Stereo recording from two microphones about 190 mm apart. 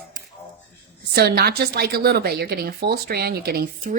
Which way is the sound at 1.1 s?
55° right (ahead or behind).